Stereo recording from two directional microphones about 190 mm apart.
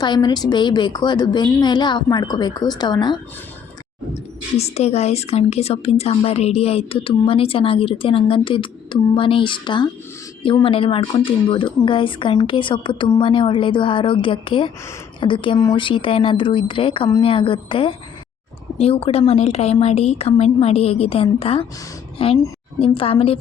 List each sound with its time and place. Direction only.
0.0 s a woman's voice: 20° left (ahead or behind)
4.5 s a woman's voice: 35° left (ahead or behind)